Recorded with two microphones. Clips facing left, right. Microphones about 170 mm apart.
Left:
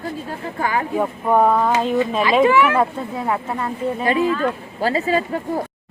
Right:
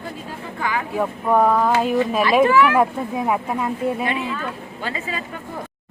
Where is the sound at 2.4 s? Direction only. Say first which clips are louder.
Left 1 dB; 20° left (ahead or behind).